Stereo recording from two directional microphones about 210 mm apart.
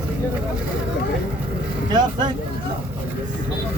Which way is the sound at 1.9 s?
20° right (ahead or behind).